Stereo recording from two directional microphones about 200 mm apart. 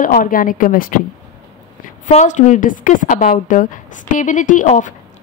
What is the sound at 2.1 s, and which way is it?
A woman's voice, 35° left (ahead or behind).